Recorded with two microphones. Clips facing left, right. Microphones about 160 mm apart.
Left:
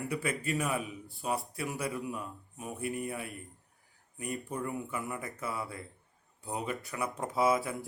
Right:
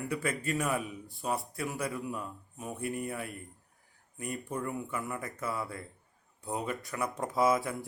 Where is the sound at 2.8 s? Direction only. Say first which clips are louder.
Even; 40° right (ahead or behind).